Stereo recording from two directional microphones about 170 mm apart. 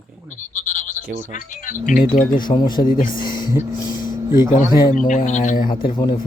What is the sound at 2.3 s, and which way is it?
Speech, 25° left (ahead or behind).